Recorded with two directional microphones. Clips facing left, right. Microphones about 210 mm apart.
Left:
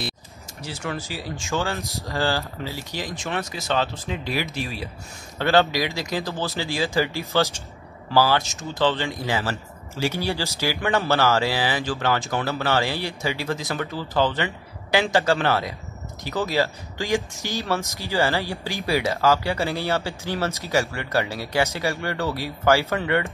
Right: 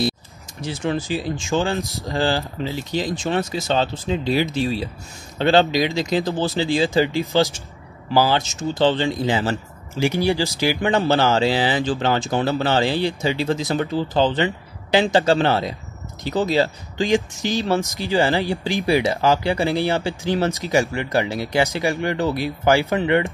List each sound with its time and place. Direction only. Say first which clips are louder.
0.6 s speech: right 7 dB; 20° right (ahead or behind)